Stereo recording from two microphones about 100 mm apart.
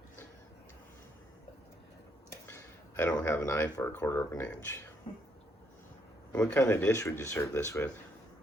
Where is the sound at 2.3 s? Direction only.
25° left (ahead or behind).